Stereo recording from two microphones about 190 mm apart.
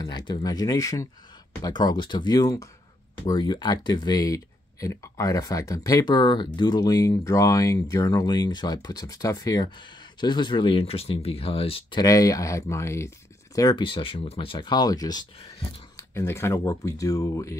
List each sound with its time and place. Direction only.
0.0 s speech: 20° left (ahead or behind)